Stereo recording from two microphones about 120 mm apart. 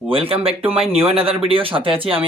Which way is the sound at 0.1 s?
50° right (ahead or behind).